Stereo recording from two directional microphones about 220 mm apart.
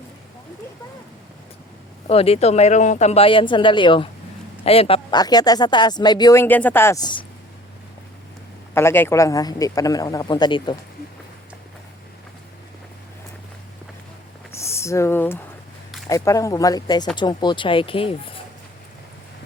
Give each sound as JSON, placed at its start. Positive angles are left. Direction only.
{"t": 2.0, "sound": "speech", "side_deg": 25}
{"t": 8.7, "sound": "speech", "side_deg": 10}
{"t": 14.5, "sound": "a sound", "side_deg": 10}
{"t": 16.0, "sound": "speech", "side_deg": 15}